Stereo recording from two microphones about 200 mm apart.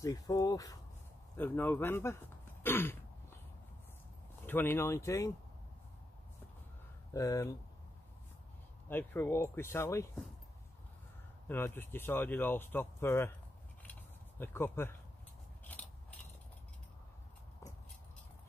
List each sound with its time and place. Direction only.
0.0 s speech: 20° left (ahead or behind)
4.5 s speech: 10° left (ahead or behind)
7.2 s speech: 15° left (ahead or behind)
8.8 s speech: 10° left (ahead or behind)
11.4 s speech: 10° left (ahead or behind)
14.4 s speech: 10° left (ahead or behind)
15.7 s biting: 10° left (ahead or behind)